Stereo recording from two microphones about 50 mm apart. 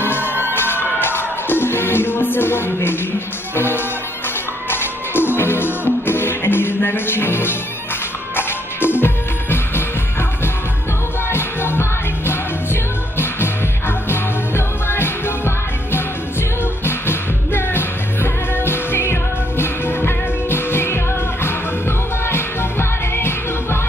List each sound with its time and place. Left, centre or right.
0.4 s music: left
11.2 s music: left